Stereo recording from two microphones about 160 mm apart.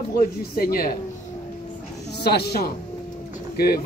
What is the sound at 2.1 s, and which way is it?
Speech, 90° left.